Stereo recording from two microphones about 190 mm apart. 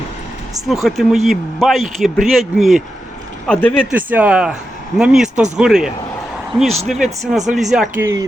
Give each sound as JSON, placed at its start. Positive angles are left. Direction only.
{"t": 0.7, "sound": "speech", "side_deg": 0}
{"t": 3.9, "sound": "speech", "side_deg": -10}